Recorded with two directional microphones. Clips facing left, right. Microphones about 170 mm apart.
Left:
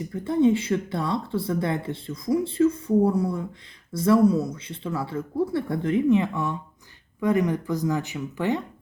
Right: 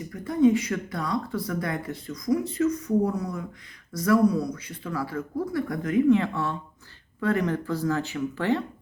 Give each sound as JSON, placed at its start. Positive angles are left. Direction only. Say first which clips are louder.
{"t": 0.1, "sound": "speech", "louder": "even", "side_deg": 25}